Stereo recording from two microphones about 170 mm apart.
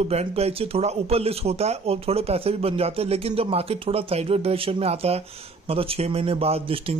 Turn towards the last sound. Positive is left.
turn(degrees=-35)  # may be behind; listen again after turning